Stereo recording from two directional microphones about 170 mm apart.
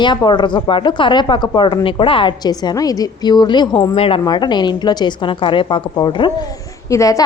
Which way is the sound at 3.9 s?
35° left (ahead or behind).